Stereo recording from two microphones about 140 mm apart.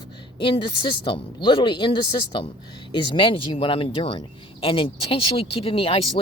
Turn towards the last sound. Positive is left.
turn(degrees=45)  # may be behind; listen again after turning